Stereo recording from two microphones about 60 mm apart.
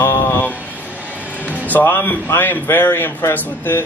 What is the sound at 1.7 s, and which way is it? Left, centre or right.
Speech, left.